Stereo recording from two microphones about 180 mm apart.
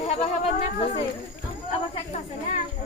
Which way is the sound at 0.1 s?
35° left (ahead or behind).